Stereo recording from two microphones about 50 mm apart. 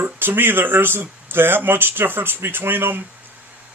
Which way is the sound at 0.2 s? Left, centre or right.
Right.